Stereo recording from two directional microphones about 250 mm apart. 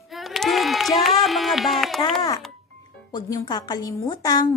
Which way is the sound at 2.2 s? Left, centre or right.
Centre.